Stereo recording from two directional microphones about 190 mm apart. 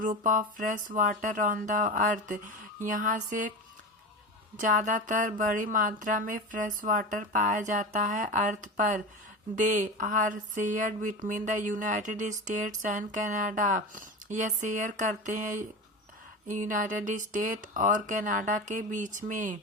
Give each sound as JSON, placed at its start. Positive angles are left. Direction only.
{"t": 0.0, "sound": "speech", "side_deg": -40}
{"t": 4.6, "sound": "speech", "side_deg": -40}